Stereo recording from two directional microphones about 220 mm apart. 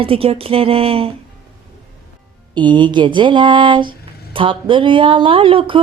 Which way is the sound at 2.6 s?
20° right (ahead or behind).